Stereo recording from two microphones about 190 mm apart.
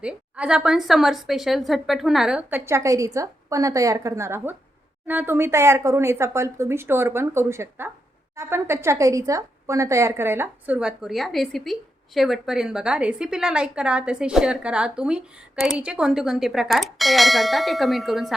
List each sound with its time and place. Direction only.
0.0 s a woman's voice: 5° right (ahead or behind)